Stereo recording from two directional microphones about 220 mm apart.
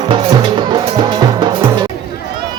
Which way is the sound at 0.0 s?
20° right (ahead or behind).